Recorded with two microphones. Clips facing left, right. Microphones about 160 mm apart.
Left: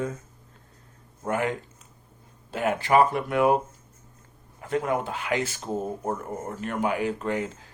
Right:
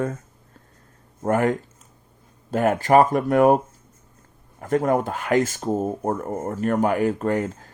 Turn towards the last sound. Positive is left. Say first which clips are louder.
# right 5 dB
turn(degrees=-45)  # may be behind; listen again after turning